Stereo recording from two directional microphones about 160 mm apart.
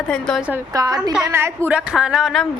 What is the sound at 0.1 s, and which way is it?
Speech, 5° left (ahead or behind).